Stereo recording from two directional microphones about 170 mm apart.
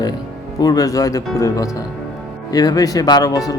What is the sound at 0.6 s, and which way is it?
Speech, 20° left (ahead or behind).